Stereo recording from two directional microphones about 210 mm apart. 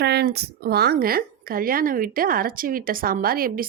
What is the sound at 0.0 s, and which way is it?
A woman's voice, 50° right (ahead or behind).